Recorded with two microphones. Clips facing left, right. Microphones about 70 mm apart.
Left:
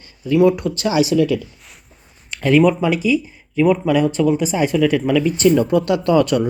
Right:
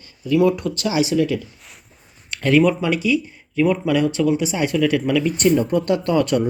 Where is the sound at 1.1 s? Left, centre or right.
Centre.